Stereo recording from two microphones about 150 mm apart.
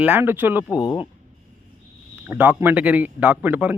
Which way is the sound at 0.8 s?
35° left (ahead or behind).